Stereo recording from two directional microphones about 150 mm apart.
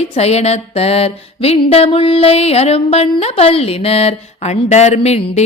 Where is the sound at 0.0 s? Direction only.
45° left (ahead or behind).